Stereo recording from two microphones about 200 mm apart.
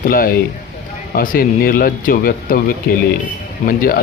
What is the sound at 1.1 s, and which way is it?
Speech, 45° left (ahead or behind).